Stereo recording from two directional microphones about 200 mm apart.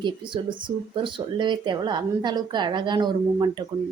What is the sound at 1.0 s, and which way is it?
A woman's voice, 25° right (ahead or behind).